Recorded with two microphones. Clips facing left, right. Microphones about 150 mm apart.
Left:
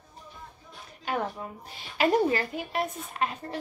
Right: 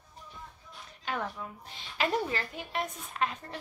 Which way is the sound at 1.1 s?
30° left (ahead or behind).